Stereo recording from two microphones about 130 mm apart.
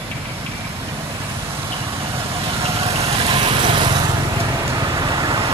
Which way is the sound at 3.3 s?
40° right (ahead or behind).